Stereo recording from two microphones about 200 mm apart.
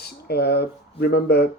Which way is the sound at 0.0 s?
50° left (ahead or behind).